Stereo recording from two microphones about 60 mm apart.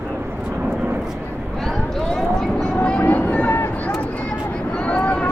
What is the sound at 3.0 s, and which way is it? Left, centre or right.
Vehicle, left.